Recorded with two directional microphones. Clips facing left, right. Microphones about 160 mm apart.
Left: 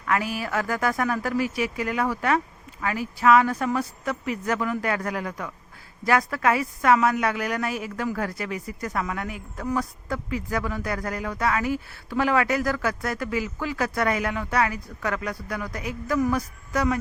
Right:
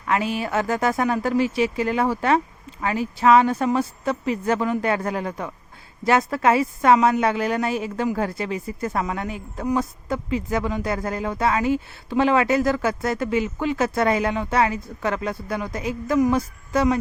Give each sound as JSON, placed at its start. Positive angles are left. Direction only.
{"t": 0.0, "sound": "a woman's voice", "side_deg": -25}